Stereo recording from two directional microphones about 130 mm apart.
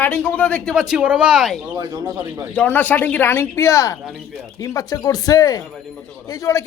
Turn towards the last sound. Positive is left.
turn(degrees=25)  # may be behind; listen again after turning